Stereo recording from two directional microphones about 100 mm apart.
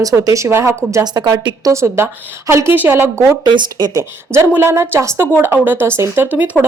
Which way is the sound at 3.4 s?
45° right (ahead or behind).